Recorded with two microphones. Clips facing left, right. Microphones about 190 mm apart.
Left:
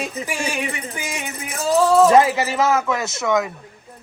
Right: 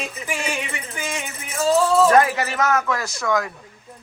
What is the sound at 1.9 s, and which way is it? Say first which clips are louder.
Music: left 5 dB; 20° left (ahead or behind).